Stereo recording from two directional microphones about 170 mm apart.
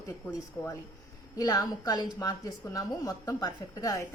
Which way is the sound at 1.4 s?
20° left (ahead or behind).